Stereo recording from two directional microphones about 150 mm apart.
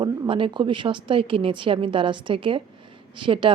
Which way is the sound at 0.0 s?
30° right (ahead or behind).